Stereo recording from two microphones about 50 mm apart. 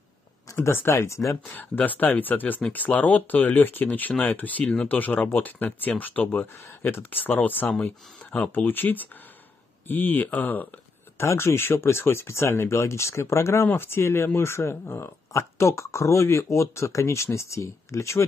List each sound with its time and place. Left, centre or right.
0.6 s speech: left
1.4 s speech: left
11.2 s speech: left
13.7 s speech: left
15.3 s speech: left